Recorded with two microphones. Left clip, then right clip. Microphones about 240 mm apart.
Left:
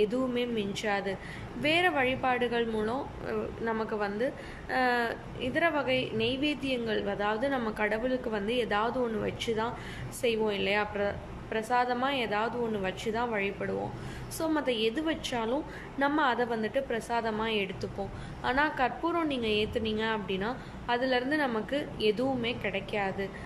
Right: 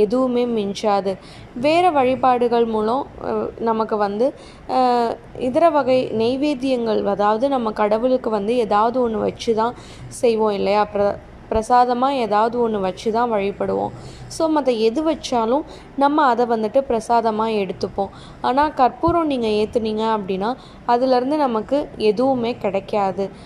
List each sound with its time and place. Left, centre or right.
0.0 s a woman's voice: centre